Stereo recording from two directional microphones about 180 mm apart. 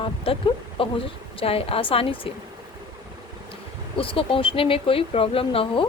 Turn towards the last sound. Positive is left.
turn(degrees=30)  # may be behind; listen again after turning